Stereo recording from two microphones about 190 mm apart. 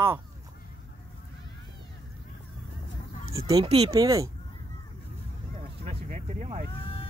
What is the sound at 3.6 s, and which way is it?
Speech, 30° right (ahead or behind).